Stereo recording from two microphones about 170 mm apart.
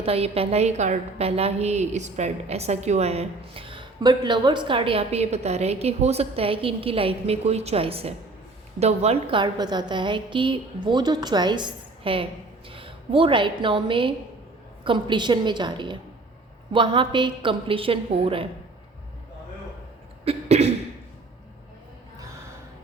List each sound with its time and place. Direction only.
0.0 s a woman's voice: 35° right (ahead or behind)
20.2 s a woman's voice: 40° right (ahead or behind)